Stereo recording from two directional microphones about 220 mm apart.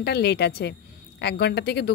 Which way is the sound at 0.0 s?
50° left (ahead or behind).